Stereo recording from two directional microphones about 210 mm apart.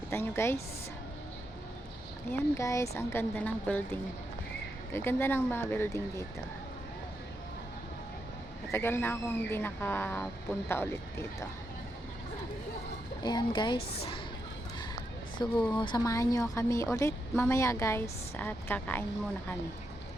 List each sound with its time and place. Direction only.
0.1 s a woman's voice: 10° left (ahead or behind)
2.3 s a woman's voice: 15° left (ahead or behind)
4.9 s a woman's voice: 10° left (ahead or behind)
8.7 s a woman's voice: 10° left (ahead or behind)
13.2 s speech: 20° left (ahead or behind)
15.7 s a woman's voice: 20° left (ahead or behind)